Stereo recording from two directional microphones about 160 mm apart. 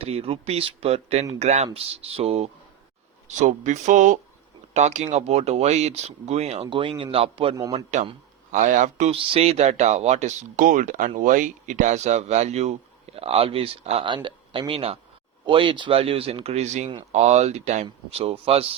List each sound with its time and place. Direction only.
0.0 s speech: 35° right (ahead or behind)
3.2 s speech: 50° right (ahead or behind)